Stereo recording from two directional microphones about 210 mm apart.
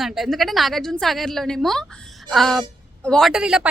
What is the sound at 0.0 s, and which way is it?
A woman's voice, centre (ahead or behind).